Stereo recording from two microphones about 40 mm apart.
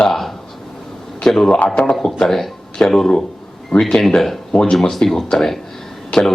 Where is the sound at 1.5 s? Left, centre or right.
Left.